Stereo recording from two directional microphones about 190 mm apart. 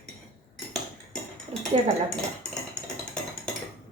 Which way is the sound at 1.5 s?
35° right (ahead or behind).